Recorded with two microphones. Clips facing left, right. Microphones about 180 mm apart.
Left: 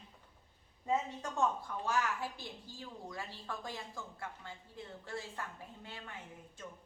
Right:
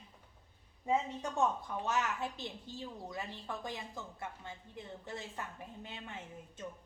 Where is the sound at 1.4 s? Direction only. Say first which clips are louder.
Right 1 dB; 20° right (ahead or behind).